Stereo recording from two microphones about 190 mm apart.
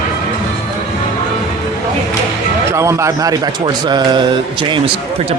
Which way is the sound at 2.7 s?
15° right (ahead or behind).